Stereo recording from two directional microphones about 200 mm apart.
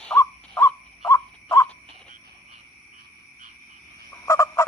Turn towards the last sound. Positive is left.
turn(degrees=15)  # may be behind; listen again after turning